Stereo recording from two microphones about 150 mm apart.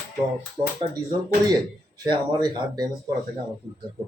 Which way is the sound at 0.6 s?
30° right (ahead or behind).